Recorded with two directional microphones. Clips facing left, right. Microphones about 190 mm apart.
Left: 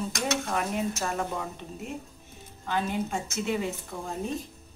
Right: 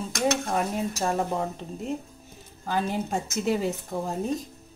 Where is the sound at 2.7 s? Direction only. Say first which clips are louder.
Right 2 dB; 40° right (ahead or behind).